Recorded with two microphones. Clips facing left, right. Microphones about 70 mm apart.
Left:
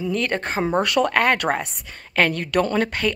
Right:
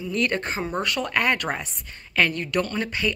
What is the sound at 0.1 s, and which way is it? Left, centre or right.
Speech, left.